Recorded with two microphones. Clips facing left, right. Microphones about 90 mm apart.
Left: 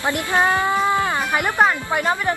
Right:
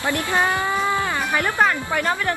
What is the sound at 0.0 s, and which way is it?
Speech, 20° left (ahead or behind).